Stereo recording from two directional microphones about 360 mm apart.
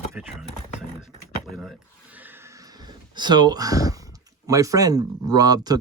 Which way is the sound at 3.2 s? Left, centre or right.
Centre.